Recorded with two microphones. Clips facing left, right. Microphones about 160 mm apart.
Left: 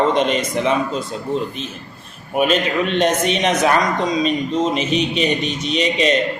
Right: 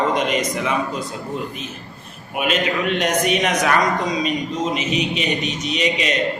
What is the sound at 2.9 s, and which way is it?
Speech, 25° left (ahead or behind).